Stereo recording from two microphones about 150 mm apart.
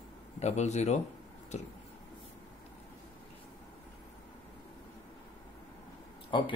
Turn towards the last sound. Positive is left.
turn(degrees=30)  # may be behind; listen again after turning